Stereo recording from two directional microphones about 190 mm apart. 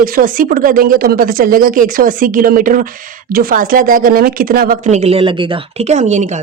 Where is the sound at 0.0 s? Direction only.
50° right (ahead or behind).